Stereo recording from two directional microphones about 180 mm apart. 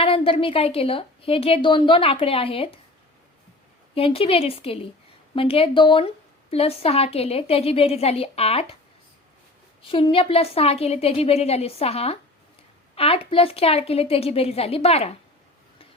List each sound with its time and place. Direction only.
0.0 s a woman's voice: 30° left (ahead or behind)
3.9 s a woman's voice: 30° left (ahead or behind)
9.8 s a woman's voice: 30° left (ahead or behind)